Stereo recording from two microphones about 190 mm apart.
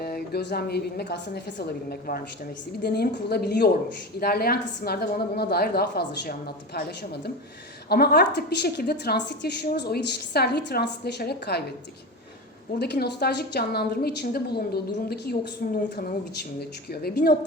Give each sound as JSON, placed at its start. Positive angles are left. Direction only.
{"t": 0.0, "sound": "a woman's voice", "side_deg": 55}
{"t": 12.8, "sound": "a woman's voice", "side_deg": 60}